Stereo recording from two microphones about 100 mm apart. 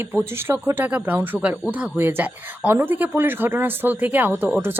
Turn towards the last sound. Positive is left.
turn(degrees=-20)  # may be behind; listen again after turning